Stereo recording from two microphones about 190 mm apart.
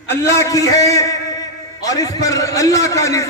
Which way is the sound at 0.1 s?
15° left (ahead or behind).